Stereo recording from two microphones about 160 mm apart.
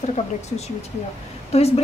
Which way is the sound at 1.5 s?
40° left (ahead or behind).